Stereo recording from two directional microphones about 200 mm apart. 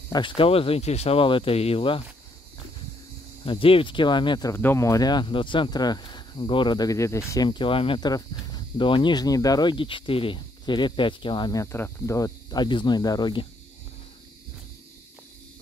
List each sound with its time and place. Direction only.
0.1 s speech: 25° left (ahead or behind)
3.4 s speech: 25° left (ahead or behind)